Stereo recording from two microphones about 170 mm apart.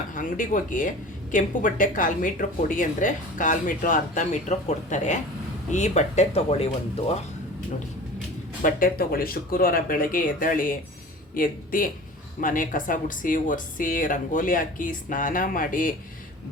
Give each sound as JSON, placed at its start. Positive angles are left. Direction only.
{"t": 0.1, "sound": "speech", "side_deg": 50}
{"t": 8.6, "sound": "speech", "side_deg": 55}